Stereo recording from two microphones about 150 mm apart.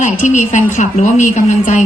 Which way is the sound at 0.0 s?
55° left (ahead or behind).